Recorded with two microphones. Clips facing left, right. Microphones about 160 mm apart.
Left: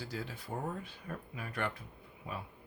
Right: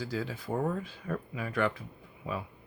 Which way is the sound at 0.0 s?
90° right.